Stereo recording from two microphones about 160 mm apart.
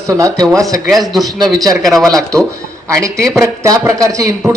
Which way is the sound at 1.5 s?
25° right (ahead or behind).